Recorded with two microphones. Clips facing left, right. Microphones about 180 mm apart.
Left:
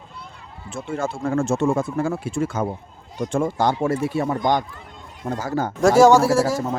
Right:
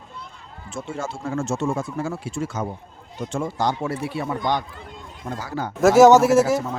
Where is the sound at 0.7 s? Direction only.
55° left (ahead or behind).